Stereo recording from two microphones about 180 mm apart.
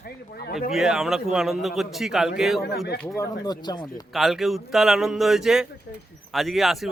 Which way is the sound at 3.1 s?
20° left (ahead or behind).